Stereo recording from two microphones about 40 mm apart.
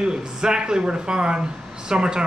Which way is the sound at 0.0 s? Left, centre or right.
Centre.